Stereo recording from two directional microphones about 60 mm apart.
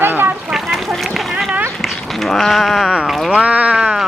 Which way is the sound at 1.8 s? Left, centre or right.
Centre.